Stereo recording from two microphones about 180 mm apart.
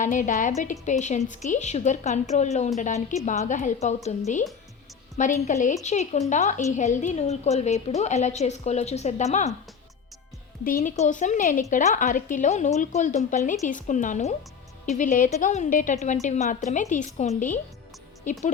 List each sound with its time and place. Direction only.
0.0 s a woman's voice: 45° left (ahead or behind)
5.1 s a woman's voice: 45° left (ahead or behind)
10.6 s a woman's voice: 50° left (ahead or behind)